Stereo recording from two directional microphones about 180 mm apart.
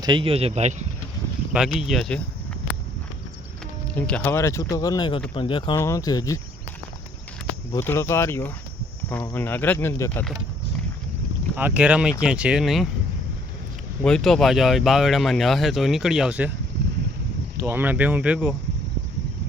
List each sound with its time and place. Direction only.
0.0 s speech: 25° right (ahead or behind)
1.5 s speech: centre (ahead or behind)
3.9 s speech: 10° left (ahead or behind); by 5.7 s 30° left (ahead or behind)
5.7 s speech: 15° left (ahead or behind)
7.7 s speech: 15° left (ahead or behind)
11.5 s speech: 10° right (ahead or behind)
14.0 s speech: 5° left (ahead or behind)
17.6 s speech: 10° right (ahead or behind)